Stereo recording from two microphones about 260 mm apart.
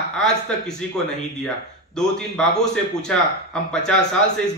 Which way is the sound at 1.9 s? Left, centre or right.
Centre.